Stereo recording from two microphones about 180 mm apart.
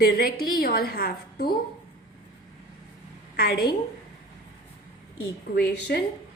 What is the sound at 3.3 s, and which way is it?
Speech, 60° left (ahead or behind).